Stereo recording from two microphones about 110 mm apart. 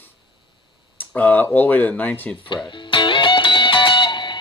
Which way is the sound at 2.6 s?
45° left (ahead or behind).